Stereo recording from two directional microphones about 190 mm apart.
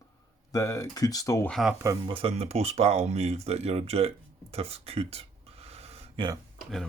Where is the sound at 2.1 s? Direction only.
30° right (ahead or behind).